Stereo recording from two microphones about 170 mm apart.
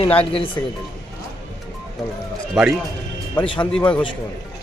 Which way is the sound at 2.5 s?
5° right (ahead or behind).